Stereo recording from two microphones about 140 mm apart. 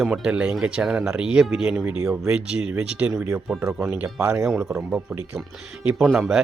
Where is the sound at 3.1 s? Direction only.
20° right (ahead or behind).